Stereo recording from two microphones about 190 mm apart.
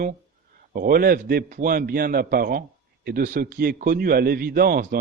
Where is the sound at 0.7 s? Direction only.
50° right (ahead or behind).